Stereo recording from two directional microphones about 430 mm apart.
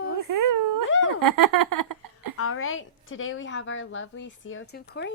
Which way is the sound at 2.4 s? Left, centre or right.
Left.